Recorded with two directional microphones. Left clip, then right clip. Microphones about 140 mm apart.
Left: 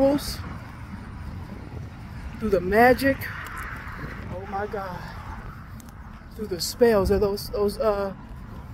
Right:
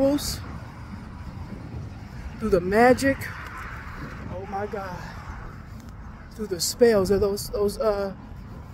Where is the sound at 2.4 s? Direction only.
25° right (ahead or behind).